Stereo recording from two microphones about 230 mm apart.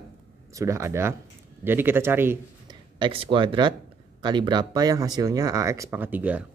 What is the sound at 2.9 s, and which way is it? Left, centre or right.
Speech, right.